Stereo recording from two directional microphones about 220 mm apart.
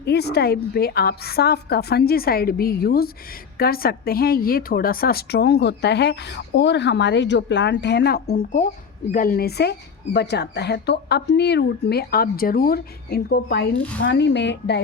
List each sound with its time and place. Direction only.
0.0 s speech: 45° left (ahead or behind)